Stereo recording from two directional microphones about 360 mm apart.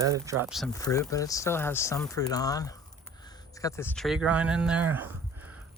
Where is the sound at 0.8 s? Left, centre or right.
Centre.